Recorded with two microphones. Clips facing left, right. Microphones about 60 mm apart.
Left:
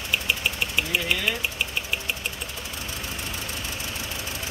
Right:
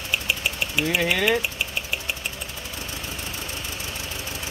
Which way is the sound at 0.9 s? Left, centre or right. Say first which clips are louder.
Right 6 dB; right.